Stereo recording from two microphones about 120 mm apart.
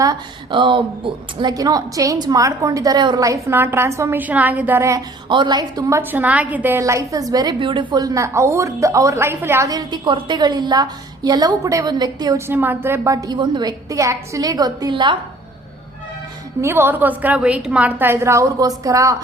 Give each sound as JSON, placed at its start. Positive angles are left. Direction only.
{"t": 0.0, "sound": "a woman's voice", "side_deg": -30}
{"t": 4.8, "sound": "a woman's voice", "side_deg": -25}
{"t": 5.3, "sound": "a woman's voice", "side_deg": -40}
{"t": 6.0, "sound": "a woman's voice", "side_deg": -15}
{"t": 6.8, "sound": "a woman's voice", "side_deg": -25}
{"t": 9.6, "sound": "a woman's voice", "side_deg": -35}
{"t": 12.5, "sound": "a woman's voice", "side_deg": -15}
{"t": 13.2, "sound": "a woman's voice", "side_deg": -40}
{"t": 16.6, "sound": "a woman's voice", "side_deg": -20}